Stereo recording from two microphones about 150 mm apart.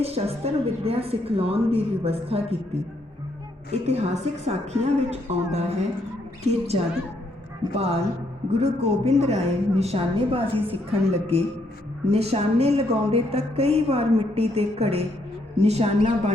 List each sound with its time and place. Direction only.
0.0 s a woman's voice: 40° right (ahead or behind)
3.7 s a woman's voice: 45° right (ahead or behind)
7.6 s a woman's voice: 40° right (ahead or behind)